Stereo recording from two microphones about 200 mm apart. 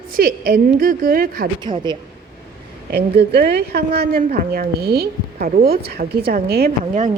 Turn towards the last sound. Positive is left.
turn(degrees=-35)  # may be behind; listen again after turning